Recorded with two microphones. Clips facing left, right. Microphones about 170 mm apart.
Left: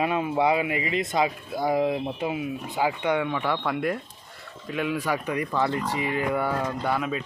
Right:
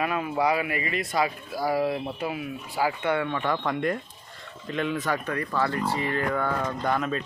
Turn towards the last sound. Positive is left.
turn(degrees=10)  # may be behind; listen again after turning